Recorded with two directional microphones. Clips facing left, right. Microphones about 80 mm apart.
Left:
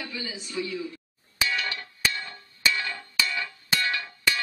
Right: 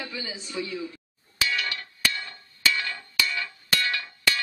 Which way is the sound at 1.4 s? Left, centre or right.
Left.